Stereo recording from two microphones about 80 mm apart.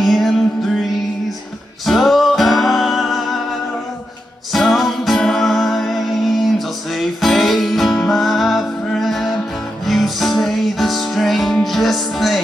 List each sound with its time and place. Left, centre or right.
0.0 s music: centre
1.9 s music: centre
4.5 s music: centre